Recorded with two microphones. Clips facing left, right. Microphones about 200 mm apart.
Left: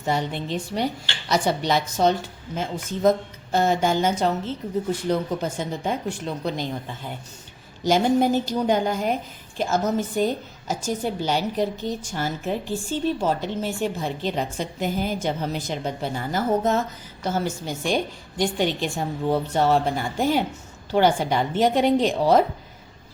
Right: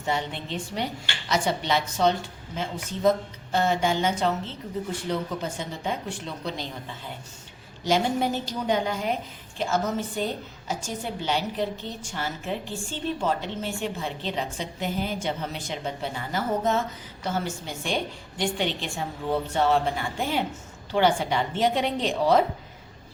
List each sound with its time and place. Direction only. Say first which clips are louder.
0.0 s a woman's voice: left 4 dB; 40° left (ahead or behind)
7.9 s a woman's voice: left 5 dB; 45° left (ahead or behind)